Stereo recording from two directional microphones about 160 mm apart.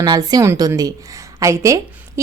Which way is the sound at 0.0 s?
25° right (ahead or behind).